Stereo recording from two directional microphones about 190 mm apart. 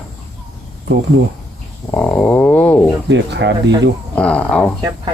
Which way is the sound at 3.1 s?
65° right (ahead or behind).